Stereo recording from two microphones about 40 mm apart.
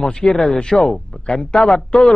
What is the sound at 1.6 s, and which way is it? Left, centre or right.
Speech, centre.